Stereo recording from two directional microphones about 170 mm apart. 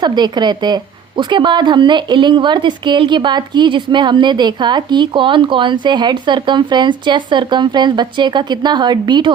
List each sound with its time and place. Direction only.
0.0 s a woman's voice: 25° right (ahead or behind)